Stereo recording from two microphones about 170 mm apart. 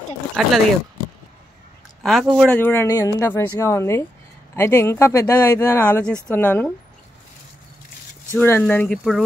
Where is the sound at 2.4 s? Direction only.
10° left (ahead or behind).